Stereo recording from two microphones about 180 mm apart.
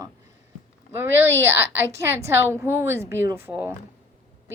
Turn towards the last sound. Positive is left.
turn(degrees=-10)  # may be behind; listen again after turning